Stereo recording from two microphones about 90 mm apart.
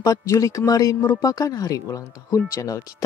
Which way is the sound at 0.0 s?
40° left (ahead or behind).